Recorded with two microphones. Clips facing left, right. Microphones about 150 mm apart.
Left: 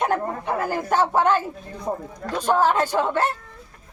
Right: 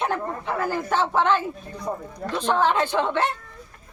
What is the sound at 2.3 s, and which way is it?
Speech, 10° left (ahead or behind).